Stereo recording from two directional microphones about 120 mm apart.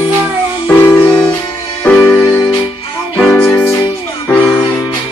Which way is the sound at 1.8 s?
15° left (ahead or behind).